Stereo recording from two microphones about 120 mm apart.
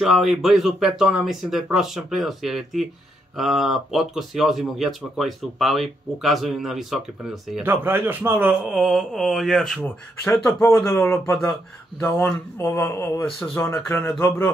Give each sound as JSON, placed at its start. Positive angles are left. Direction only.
{"t": 0.0, "sound": "speech", "side_deg": 0}
{"t": 7.6, "sound": "a man's voice", "side_deg": -15}
{"t": 8.6, "sound": "speech", "side_deg": 0}
{"t": 9.8, "sound": "speech", "side_deg": 15}